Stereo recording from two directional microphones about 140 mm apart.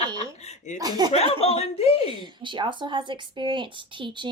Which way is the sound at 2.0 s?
35° right (ahead or behind).